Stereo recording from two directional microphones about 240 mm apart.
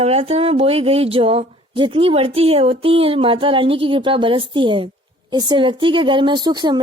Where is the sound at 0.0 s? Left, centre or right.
Right.